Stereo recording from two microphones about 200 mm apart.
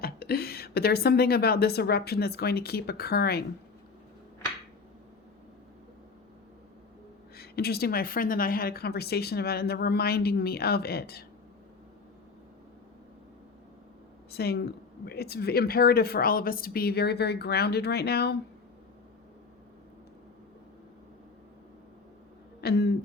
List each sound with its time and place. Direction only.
0.0 s speech: 50° left (ahead or behind)
7.3 s speech: 50° left (ahead or behind)
14.3 s speech: 50° left (ahead or behind)
22.6 s speech: 55° left (ahead or behind)